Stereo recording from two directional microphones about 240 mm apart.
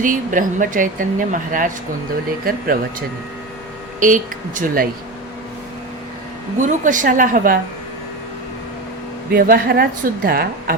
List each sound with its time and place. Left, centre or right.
0.0 s a woman's voice: right
4.0 s a woman's voice: right
6.6 s a woman's voice: right
9.3 s a woman's voice: right